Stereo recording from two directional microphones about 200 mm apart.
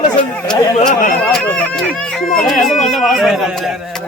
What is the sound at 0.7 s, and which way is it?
Speech, 40° left (ahead or behind).